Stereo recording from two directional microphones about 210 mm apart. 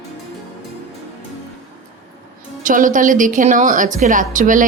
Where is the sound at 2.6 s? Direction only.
40° right (ahead or behind).